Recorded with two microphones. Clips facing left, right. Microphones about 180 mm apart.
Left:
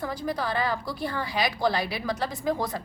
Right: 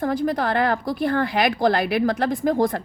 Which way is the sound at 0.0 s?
50° right (ahead or behind).